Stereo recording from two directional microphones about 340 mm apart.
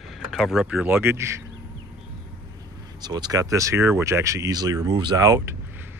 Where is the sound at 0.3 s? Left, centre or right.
Centre.